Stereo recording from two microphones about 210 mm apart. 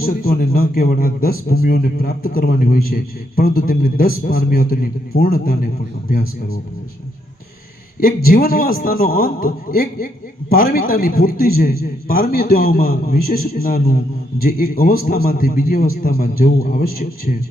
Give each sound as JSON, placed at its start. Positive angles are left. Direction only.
{"t": 0.0, "sound": "a man's voice", "side_deg": 45}
{"t": 8.0, "sound": "a man's voice", "side_deg": 45}